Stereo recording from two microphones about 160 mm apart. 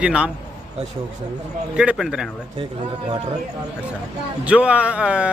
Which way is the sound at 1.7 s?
5° right (ahead or behind).